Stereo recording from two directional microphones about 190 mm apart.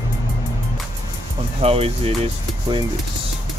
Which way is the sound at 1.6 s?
30° right (ahead or behind).